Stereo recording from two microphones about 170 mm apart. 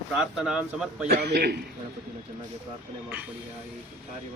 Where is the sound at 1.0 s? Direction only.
75° right (ahead or behind).